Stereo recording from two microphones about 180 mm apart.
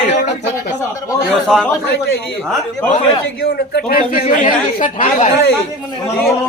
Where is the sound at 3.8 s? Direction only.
50° left (ahead or behind).